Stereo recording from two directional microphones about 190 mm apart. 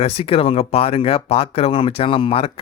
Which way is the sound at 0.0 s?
30° left (ahead or behind).